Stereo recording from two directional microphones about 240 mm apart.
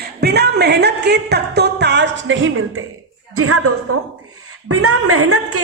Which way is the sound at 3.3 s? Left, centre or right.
Right.